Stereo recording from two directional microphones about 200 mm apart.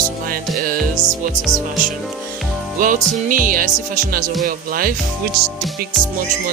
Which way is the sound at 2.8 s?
40° right (ahead or behind).